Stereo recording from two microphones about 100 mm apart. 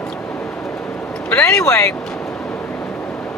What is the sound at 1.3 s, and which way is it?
Speech, 10° left (ahead or behind).